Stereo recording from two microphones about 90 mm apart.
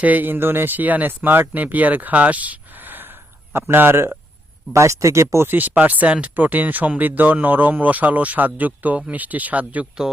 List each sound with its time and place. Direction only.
0.0 s speech: 20° right (ahead or behind)